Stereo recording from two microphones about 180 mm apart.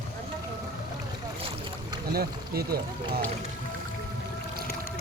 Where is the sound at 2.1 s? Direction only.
60° right (ahead or behind).